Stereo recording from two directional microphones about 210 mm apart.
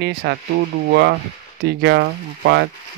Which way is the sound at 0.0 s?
50° right (ahead or behind).